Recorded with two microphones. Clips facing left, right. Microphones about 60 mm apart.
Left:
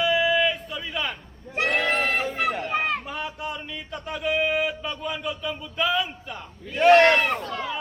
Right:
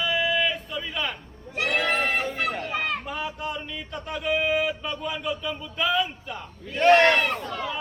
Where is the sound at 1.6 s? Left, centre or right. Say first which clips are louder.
Left 1 dB; centre.